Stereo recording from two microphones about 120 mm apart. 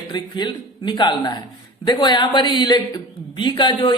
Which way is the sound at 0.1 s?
40° left (ahead or behind).